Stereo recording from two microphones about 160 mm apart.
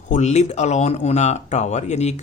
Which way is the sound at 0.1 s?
45° left (ahead or behind).